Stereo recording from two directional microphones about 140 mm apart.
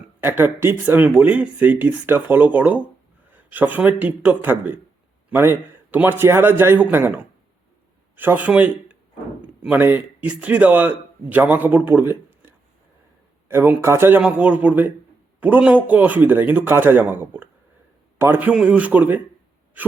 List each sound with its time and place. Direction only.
0.2 s a man's voice: 15° right (ahead or behind)